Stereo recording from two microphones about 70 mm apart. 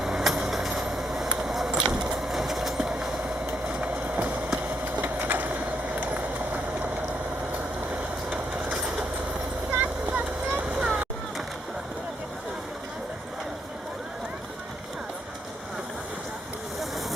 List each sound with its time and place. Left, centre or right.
0.0 s vehicle: centre
4.9 s a sound: right
8.3 s vehicle: centre